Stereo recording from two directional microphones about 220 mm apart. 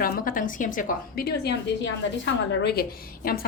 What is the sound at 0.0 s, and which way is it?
A woman's voice, 40° left (ahead or behind).